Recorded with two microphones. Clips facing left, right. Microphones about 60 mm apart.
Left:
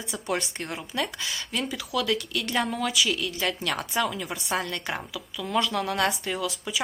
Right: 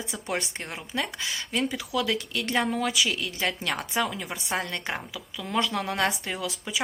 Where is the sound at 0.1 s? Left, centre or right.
Right.